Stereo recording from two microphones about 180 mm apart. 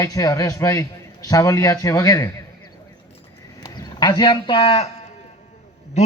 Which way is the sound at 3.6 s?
25° left (ahead or behind).